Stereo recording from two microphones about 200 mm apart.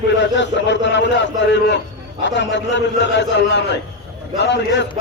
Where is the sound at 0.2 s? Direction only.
65° left (ahead or behind).